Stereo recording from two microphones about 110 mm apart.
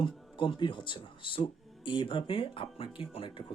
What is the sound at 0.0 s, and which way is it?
Speech, 50° left (ahead or behind).